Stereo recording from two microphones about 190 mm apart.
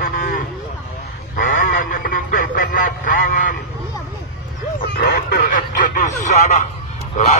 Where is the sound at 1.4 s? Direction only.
40° left (ahead or behind).